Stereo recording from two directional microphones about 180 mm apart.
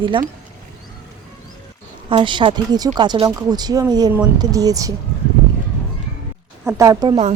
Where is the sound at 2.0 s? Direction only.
30° right (ahead or behind).